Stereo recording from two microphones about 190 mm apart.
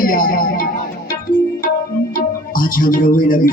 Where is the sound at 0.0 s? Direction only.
50° left (ahead or behind).